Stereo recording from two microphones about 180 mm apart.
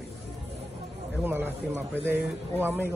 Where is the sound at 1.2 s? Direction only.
10° right (ahead or behind).